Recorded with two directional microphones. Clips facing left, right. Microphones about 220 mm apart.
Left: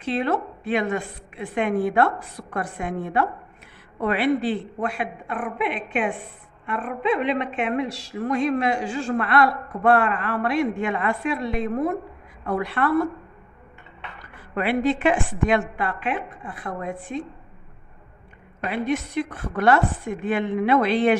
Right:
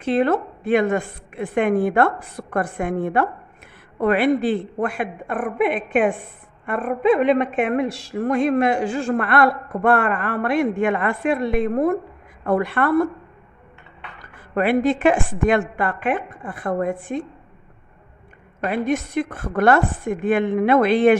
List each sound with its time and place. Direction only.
0.0 s a woman's voice: 50° right (ahead or behind)
14.5 s a woman's voice: 45° right (ahead or behind)
18.7 s a woman's voice: 50° right (ahead or behind)